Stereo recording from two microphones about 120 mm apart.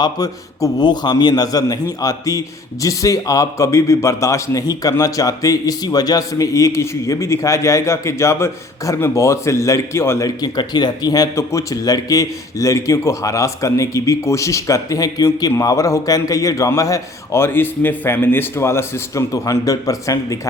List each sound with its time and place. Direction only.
0.0 s a man's voice: 35° left (ahead or behind)
10.2 s speech: 35° left (ahead or behind)